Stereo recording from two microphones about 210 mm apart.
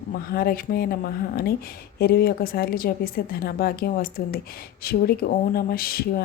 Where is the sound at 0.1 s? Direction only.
45° left (ahead or behind).